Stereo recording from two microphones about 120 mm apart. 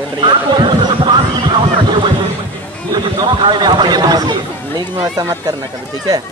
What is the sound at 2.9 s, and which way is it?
Speech, 40° right (ahead or behind).